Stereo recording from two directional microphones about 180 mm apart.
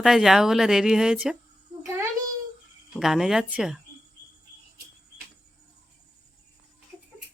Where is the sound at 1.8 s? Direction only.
15° right (ahead or behind).